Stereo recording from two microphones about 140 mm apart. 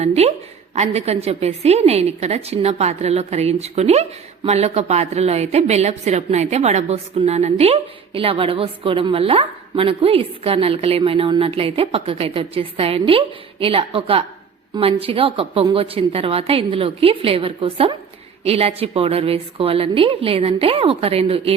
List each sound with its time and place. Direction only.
0.0 s a woman's voice: 50° right (ahead or behind)